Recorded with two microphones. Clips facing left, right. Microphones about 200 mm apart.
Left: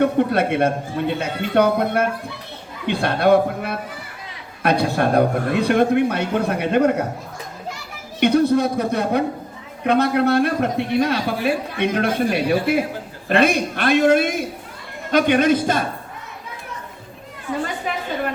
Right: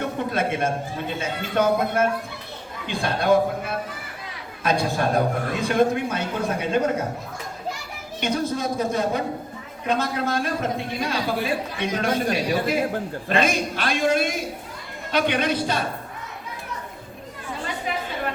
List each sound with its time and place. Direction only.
0.2 s a man's voice: 65° left (ahead or behind)
8.2 s a man's voice: 60° left (ahead or behind)